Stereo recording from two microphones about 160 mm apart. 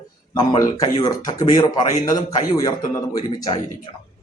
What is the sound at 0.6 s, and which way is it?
A man's voice, 20° left (ahead or behind).